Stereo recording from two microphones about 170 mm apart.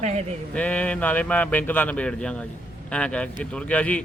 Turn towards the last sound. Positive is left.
turn(degrees=5)  # may be behind; listen again after turning